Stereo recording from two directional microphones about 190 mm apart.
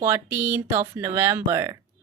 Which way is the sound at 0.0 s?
10° right (ahead or behind).